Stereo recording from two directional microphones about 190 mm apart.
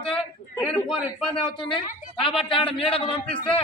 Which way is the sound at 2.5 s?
25° left (ahead or behind).